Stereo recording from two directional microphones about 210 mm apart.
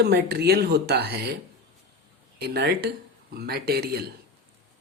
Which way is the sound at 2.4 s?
50° right (ahead or behind).